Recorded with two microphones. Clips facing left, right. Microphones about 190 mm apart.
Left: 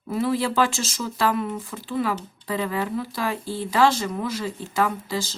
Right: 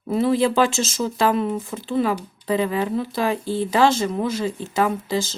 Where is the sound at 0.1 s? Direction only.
25° right (ahead or behind).